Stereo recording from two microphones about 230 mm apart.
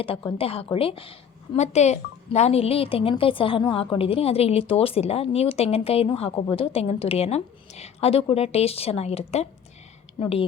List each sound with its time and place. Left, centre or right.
0.0 s a woman's voice: left